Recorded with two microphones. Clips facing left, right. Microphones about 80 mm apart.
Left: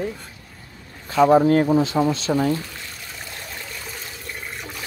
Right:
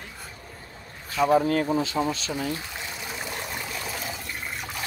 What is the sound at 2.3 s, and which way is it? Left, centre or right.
Speech, left.